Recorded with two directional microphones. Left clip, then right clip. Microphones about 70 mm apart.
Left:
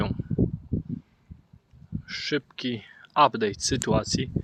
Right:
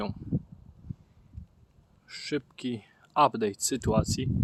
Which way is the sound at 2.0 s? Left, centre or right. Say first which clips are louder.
Left 5 dB; centre.